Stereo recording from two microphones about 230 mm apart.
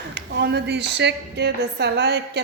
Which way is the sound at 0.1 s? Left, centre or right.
Right.